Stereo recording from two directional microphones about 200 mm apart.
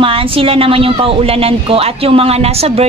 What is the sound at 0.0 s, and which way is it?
A woman's voice, 25° right (ahead or behind).